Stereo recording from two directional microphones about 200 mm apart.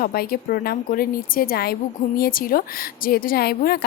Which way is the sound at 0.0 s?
50° left (ahead or behind).